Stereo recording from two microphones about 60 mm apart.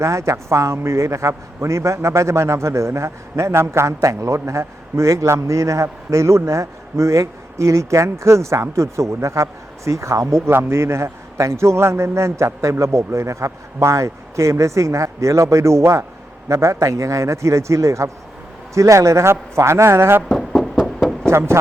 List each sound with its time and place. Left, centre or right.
0.0 s a man's voice: right
10.5 s a man's voice: right
20.2 s a sound: centre
21.2 s speech: right